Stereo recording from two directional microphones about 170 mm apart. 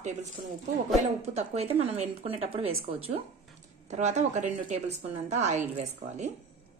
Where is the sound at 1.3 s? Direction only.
35° right (ahead or behind).